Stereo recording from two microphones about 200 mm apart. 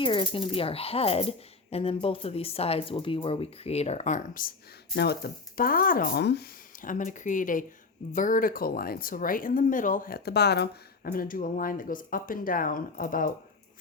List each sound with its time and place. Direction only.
0.0 s speech: 25° left (ahead or behind); by 4.5 s 40° left (ahead or behind)
4.9 s speech: 50° left (ahead or behind)